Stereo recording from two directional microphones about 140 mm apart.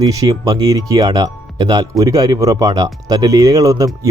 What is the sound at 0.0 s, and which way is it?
Speech, 25° right (ahead or behind).